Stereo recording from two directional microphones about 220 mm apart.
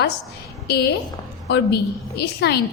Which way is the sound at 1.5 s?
50° left (ahead or behind).